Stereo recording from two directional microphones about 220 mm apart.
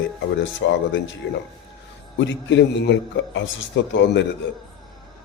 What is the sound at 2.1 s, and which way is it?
A man's voice, 55° left (ahead or behind).